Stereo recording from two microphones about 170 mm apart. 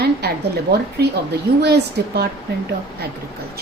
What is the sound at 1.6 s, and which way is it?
A woman's voice, 75° right (ahead or behind).